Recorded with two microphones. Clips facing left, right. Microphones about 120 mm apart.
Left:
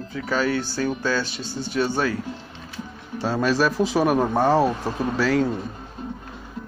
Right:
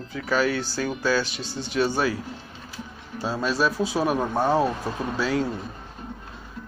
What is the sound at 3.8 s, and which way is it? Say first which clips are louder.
Speech: left 4 dB; 70° left (ahead or behind).